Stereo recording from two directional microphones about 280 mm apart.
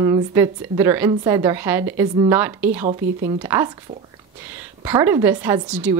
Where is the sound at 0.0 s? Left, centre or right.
Centre.